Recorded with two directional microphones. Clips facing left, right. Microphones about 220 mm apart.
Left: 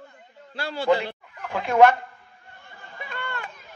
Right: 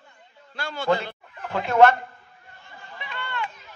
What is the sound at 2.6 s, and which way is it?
Chatter, 45° left (ahead or behind).